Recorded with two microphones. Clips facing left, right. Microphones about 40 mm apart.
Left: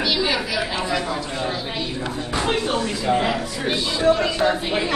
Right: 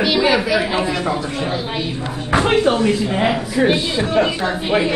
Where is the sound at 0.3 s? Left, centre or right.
Centre.